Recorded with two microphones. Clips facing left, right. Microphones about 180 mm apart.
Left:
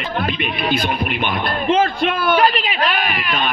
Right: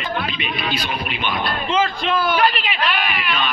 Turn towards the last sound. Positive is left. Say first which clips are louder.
# left 2 dB
turn(degrees=45)  # may be behind; listen again after turning